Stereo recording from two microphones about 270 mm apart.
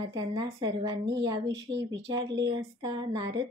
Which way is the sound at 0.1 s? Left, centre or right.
Centre.